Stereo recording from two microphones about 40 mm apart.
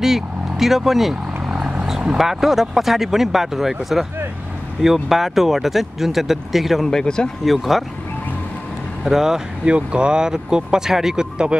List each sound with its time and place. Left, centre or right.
0.0 s speech: centre
2.1 s speech: centre
6.9 s speech: centre
7.4 s speech: centre
9.0 s speech: centre
9.7 s speech: right